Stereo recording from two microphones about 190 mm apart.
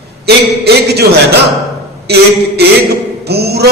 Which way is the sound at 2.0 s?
60° right (ahead or behind).